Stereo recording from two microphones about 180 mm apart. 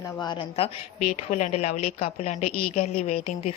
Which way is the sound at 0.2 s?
30° left (ahead or behind).